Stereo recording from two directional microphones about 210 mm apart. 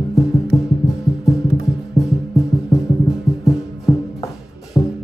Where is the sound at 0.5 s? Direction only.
20° left (ahead or behind).